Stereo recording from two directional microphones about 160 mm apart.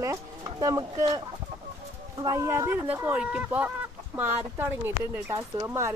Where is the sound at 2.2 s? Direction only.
20° right (ahead or behind).